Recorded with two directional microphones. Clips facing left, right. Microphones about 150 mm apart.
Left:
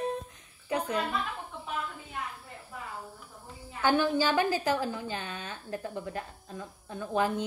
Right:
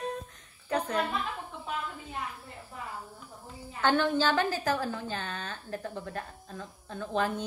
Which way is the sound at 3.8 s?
10° left (ahead or behind).